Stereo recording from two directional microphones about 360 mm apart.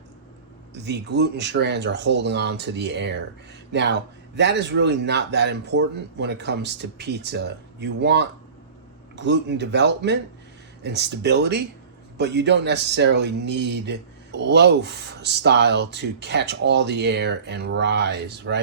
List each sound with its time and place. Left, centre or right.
0.7 s speech: right